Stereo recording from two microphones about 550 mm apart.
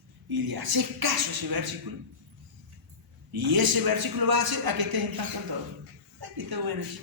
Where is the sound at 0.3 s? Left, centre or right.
Right.